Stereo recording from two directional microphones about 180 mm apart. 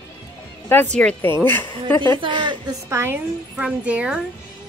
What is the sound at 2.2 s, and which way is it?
Speech, 25° right (ahead or behind).